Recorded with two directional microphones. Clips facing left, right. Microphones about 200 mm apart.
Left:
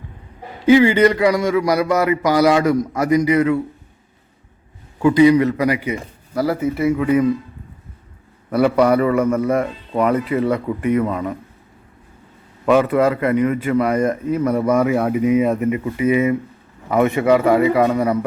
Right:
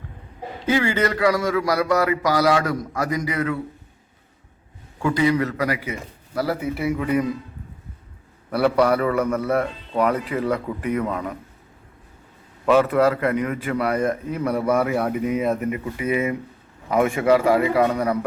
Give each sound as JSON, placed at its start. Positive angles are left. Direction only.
{"t": 0.6, "sound": "speech", "side_deg": 15}
{"t": 5.0, "sound": "a man's voice", "side_deg": 15}
{"t": 6.3, "sound": "speech", "side_deg": 0}
{"t": 8.5, "sound": "a man's voice", "side_deg": 5}
{"t": 12.7, "sound": "speech", "side_deg": 10}
{"t": 14.5, "sound": "speech", "side_deg": -5}
{"t": 14.8, "sound": "speech", "side_deg": 5}